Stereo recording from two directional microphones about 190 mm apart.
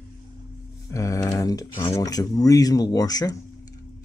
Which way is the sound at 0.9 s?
15° left (ahead or behind).